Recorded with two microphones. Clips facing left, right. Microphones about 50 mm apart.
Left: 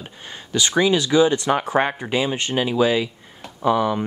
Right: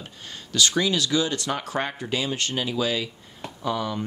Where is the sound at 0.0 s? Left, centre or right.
Left.